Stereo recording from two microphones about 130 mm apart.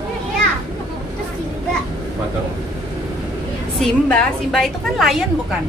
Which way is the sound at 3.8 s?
5° left (ahead or behind).